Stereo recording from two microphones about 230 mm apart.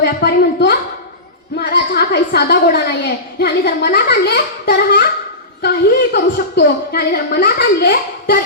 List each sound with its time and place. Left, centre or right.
0.0 s a woman's voice: left
6.1 s a woman's voice: left